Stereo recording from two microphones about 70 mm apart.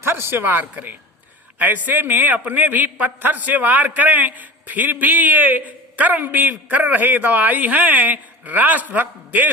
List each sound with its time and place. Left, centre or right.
0.0 s a man's voice: right